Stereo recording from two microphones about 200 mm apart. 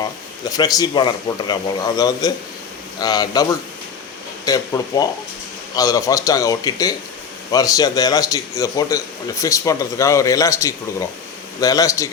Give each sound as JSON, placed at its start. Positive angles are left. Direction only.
{"t": 0.5, "sound": "speech", "side_deg": 20}
{"t": 4.4, "sound": "a man's voice", "side_deg": 20}